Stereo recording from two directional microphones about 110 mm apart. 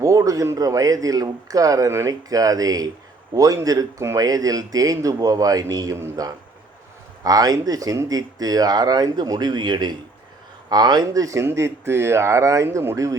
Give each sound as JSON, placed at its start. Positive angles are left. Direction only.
{"t": 0.0, "sound": "speech", "side_deg": -30}